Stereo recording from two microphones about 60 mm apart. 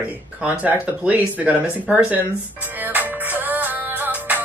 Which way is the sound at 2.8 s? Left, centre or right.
Right.